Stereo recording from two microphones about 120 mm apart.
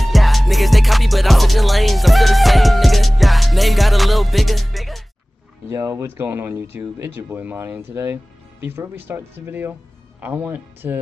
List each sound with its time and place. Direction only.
0.0 s music: centre (ahead or behind)
5.7 s speech: 20° right (ahead or behind)